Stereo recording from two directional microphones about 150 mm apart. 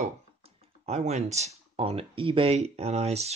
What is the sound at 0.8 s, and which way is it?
Speech, 45° right (ahead or behind).